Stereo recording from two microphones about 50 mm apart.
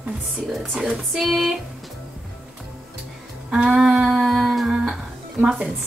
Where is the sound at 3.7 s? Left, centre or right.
Centre.